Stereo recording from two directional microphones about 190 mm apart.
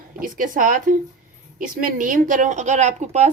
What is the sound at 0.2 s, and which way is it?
A woman's voice, 45° right (ahead or behind).